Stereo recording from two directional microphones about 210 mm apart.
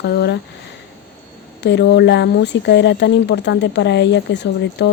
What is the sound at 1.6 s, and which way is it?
Speech, 55° left (ahead or behind).